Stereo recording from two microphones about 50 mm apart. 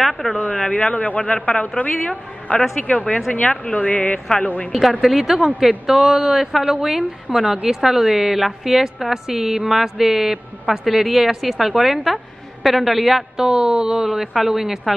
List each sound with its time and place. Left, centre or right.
0.0 s a woman's voice: centre
0.4 s a man's voice: centre
5.0 s a woman's voice: centre
13.4 s a woman's voice: centre